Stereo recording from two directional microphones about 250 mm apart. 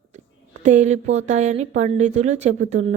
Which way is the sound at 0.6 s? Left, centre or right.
Right.